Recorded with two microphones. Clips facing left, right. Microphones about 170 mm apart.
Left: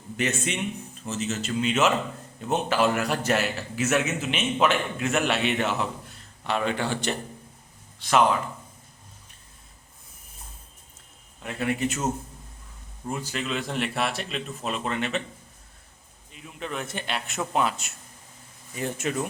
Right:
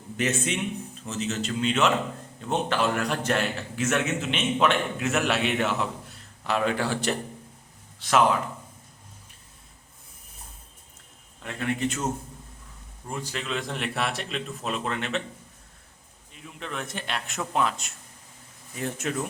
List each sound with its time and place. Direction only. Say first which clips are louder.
0.2 s a man's voice: right 1 dB; centre (ahead or behind)
11.4 s a man's voice: left 1 dB; 10° left (ahead or behind)
13.1 s a man's voice: left 2 dB; 5° left (ahead or behind)
16.3 s a man's voice: left 2 dB; 5° left (ahead or behind)